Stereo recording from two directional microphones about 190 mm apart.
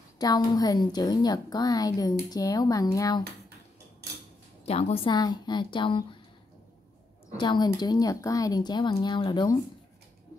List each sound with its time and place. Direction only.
0.2 s a woman's voice: 20° left (ahead or behind)
4.6 s a woman's voice: 30° left (ahead or behind)
7.3 s a woman's voice: 20° left (ahead or behind)